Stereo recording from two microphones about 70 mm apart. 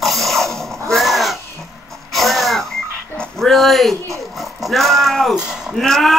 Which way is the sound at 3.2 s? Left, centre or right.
Centre.